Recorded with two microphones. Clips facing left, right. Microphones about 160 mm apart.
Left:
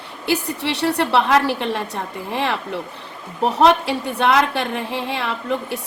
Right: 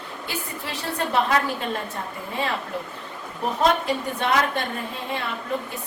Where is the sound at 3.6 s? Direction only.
90° left.